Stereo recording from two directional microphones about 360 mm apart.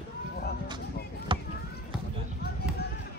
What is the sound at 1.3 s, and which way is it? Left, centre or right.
Basketball bounce, centre.